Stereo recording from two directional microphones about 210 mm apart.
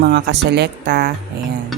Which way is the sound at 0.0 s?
50° right (ahead or behind).